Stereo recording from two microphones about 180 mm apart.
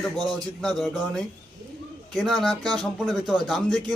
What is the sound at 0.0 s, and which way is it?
A man's voice, centre (ahead or behind).